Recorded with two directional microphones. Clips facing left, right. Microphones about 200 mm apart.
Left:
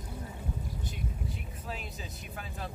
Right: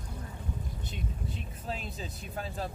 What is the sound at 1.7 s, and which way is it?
Speech, 30° right (ahead or behind).